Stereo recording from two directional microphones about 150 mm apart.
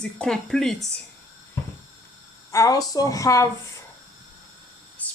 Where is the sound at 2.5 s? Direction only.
25° left (ahead or behind).